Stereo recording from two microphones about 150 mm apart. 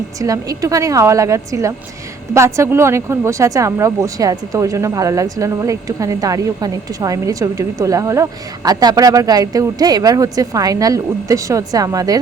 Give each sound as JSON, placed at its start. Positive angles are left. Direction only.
{"t": 0.2, "sound": "speech", "side_deg": -20}